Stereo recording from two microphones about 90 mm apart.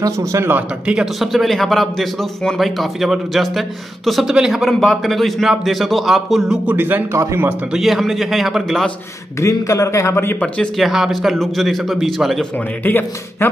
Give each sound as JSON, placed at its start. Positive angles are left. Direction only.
{"t": 0.0, "sound": "a man's voice", "side_deg": -35}
{"t": 0.8, "sound": "a man's voice", "side_deg": -5}
{"t": 7.7, "sound": "a man's voice", "side_deg": 0}
{"t": 9.4, "sound": "a man's voice", "side_deg": 35}
{"t": 10.8, "sound": "a man's voice", "side_deg": 0}
{"t": 12.8, "sound": "a man's voice", "side_deg": 20}